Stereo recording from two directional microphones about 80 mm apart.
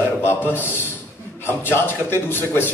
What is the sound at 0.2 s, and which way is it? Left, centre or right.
A man's voice, left.